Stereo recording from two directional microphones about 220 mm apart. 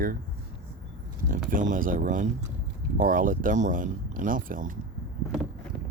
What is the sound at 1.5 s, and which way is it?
Speech, 35° right (ahead or behind).